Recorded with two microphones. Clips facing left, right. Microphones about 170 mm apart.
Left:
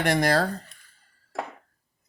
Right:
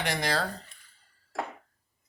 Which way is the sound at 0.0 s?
50° left (ahead or behind).